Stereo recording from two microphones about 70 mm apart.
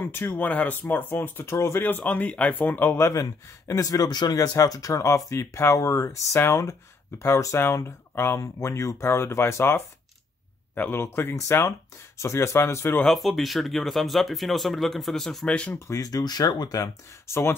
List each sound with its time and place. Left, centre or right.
0.0 s speech: left
3.0 s speech: left
4.4 s speech: left
10.9 s speech: left
11.3 s speech: left
13.0 s speech: centre
15.4 s speech: centre
16.0 s speech: left
17.3 s speech: left